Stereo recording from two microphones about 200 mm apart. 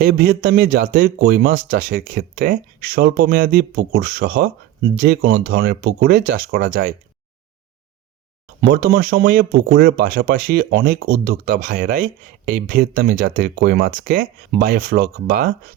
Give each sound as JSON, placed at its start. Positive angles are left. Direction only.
{"t": 0.0, "sound": "speech", "side_deg": -45}
{"t": 8.6, "sound": "speech", "side_deg": -50}